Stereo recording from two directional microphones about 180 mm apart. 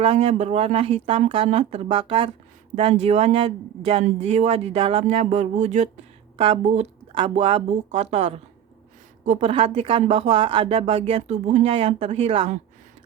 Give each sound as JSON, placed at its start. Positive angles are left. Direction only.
{"t": 0.0, "sound": "speech", "side_deg": -35}
{"t": 6.3, "sound": "speech", "side_deg": -30}